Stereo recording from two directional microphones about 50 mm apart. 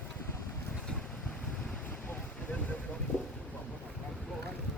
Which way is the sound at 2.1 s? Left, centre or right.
Left.